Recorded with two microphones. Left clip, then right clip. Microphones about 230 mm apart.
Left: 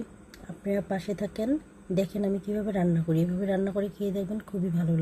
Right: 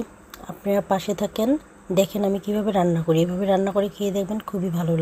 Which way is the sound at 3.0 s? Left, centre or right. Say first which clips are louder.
Right 9 dB; right.